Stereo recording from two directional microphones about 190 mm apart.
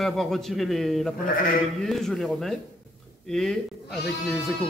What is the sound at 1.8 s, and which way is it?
Speech, centre (ahead or behind).